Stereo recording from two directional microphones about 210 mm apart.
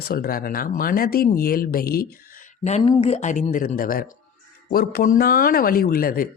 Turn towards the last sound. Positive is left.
turn(degrees=45)  # may be behind; listen again after turning